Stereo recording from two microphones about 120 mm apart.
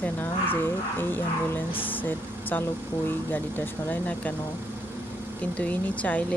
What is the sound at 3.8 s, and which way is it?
Speech, 15° left (ahead or behind).